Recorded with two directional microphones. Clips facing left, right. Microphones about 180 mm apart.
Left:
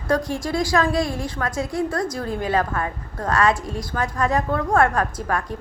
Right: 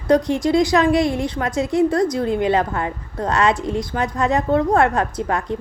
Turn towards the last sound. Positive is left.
turn(degrees=-25)  # may be behind; listen again after turning